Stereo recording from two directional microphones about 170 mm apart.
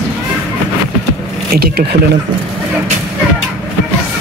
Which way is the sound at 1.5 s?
65° right (ahead or behind).